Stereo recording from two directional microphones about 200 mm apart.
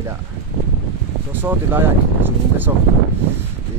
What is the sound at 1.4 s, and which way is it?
Speech, 10° right (ahead or behind).